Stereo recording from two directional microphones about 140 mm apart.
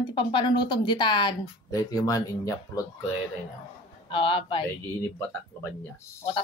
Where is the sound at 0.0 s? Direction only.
35° left (ahead or behind).